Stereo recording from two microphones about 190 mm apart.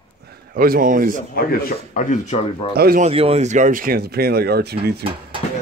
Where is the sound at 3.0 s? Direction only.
30° right (ahead or behind); by 4.9 s 55° right (ahead or behind).